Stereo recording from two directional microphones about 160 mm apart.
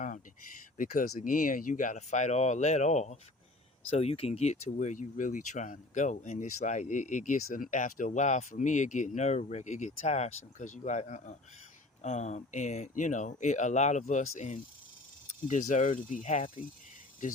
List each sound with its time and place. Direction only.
0.8 s speech: 60° left (ahead or behind); by 16.6 s 40° left (ahead or behind)